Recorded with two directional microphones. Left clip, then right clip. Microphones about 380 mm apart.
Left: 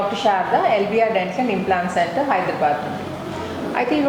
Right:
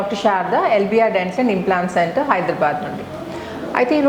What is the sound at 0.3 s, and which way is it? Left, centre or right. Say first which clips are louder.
A woman's voice: right 1 dB; right.